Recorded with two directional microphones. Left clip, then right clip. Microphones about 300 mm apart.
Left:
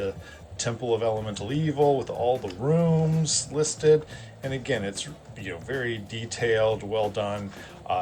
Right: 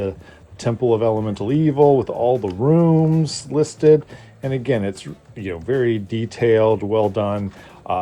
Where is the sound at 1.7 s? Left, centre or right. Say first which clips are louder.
Right 8 dB; right.